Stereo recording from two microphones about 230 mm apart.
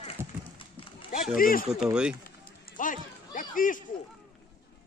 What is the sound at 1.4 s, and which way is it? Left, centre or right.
Speech, left.